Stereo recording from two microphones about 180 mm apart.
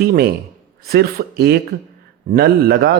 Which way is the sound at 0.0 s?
60° right (ahead or behind).